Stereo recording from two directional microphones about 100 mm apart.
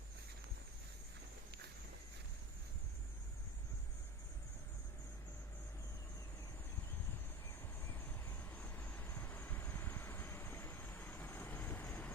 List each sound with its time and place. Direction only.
8.4 s vehicle: 20° left (ahead or behind)